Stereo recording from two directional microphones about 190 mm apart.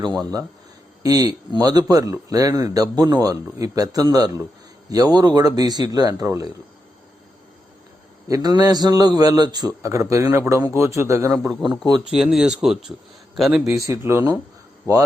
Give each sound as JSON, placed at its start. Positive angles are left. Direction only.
{"t": 0.2, "sound": "a man's voice", "side_deg": -20}
{"t": 8.3, "sound": "a man's voice", "side_deg": -20}
{"t": 12.1, "sound": "a man's voice", "side_deg": -5}
{"t": 13.7, "sound": "speech", "side_deg": -15}